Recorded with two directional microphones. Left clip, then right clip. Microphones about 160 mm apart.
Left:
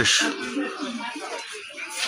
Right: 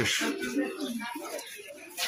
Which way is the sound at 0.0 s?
15° left (ahead or behind).